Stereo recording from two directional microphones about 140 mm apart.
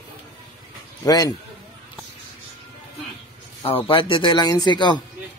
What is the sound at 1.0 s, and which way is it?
Speech, 25° left (ahead or behind).